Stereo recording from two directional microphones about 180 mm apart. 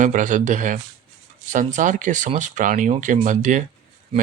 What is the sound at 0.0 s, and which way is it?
Speech, 45° right (ahead or behind).